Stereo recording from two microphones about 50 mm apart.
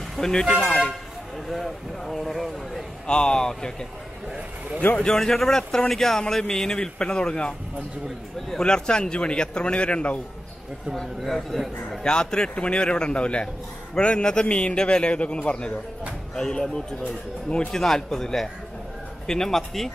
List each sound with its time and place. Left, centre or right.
0.2 s speech: centre
3.1 s speech: centre
4.9 s speech: centre
11.0 s speech: centre
12.0 s a man's voice: centre
16.3 s speech: centre